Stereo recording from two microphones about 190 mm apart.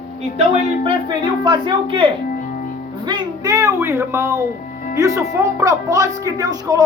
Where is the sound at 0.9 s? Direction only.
25° right (ahead or behind).